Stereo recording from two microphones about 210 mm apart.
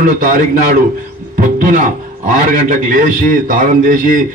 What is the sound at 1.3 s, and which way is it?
A man's voice, 40° right (ahead or behind).